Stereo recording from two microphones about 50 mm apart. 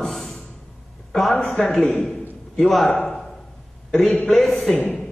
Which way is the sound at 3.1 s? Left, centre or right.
Centre.